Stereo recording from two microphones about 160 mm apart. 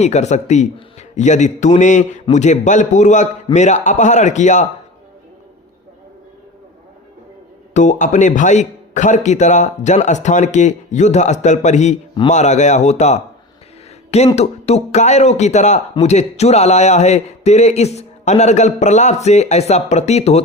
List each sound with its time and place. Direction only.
0.0 s speech: 45° left (ahead or behind)
7.7 s speech: 50° left (ahead or behind)
14.3 s speech: 40° left (ahead or behind)